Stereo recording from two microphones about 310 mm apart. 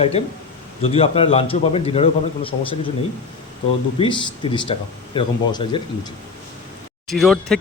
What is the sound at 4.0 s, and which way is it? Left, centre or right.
A man's voice, centre.